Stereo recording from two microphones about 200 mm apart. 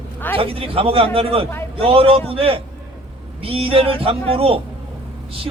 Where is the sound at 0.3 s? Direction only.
30° right (ahead or behind).